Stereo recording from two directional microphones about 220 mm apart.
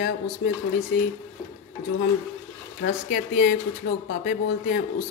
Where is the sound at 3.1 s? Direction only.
40° left (ahead or behind).